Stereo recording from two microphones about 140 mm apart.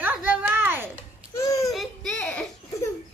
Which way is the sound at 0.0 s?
10° right (ahead or behind).